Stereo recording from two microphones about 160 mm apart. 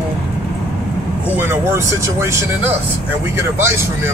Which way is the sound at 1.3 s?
15° right (ahead or behind).